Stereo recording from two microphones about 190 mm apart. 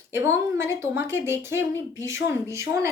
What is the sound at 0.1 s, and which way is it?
Speech, 15° right (ahead or behind).